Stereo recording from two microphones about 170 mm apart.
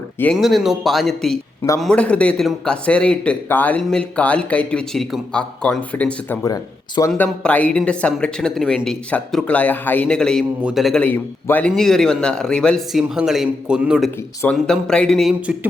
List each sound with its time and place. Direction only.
0.3 s a man's voice: centre (ahead or behind)
6.5 s speech: 20° left (ahead or behind)
7.1 s speech: 5° left (ahead or behind)